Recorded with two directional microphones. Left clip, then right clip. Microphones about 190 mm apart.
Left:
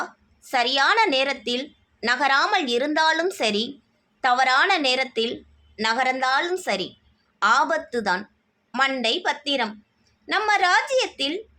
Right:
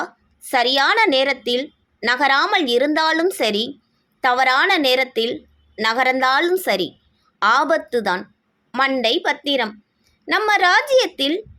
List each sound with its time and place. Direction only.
0.0 s a woman's voice: 20° right (ahead or behind)